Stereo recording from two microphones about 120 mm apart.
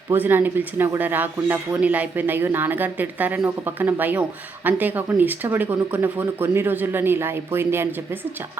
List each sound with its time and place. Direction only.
0.1 s speech: 15° right (ahead or behind)